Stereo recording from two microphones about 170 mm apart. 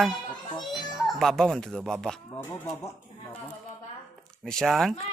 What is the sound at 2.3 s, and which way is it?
Speech, 15° left (ahead or behind).